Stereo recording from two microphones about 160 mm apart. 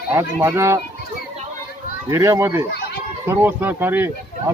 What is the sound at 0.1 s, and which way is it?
Speech, 15° right (ahead or behind).